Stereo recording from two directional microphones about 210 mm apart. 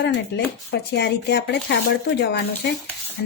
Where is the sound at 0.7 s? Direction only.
55° left (ahead or behind).